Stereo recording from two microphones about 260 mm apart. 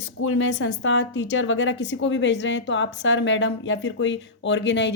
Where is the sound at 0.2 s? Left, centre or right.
Left.